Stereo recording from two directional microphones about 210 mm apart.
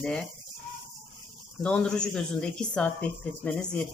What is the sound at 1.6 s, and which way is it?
Speech, 5° left (ahead or behind).